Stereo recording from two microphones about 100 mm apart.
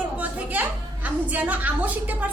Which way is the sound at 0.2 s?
15° right (ahead or behind).